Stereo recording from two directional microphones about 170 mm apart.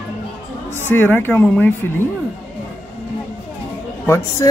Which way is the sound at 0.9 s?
10° left (ahead or behind).